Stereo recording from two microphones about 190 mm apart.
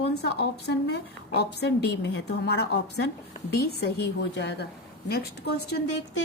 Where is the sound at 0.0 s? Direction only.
60° left (ahead or behind).